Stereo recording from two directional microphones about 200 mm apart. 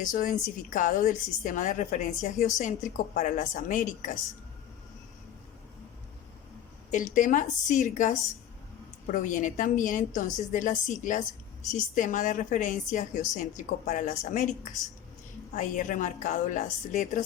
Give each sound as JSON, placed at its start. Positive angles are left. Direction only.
{"t": 0.0, "sound": "a woman's voice", "side_deg": 40}
{"t": 6.9, "sound": "a woman's voice", "side_deg": 40}
{"t": 9.1, "sound": "a woman's voice", "side_deg": 40}
{"t": 15.5, "sound": "a woman's voice", "side_deg": 40}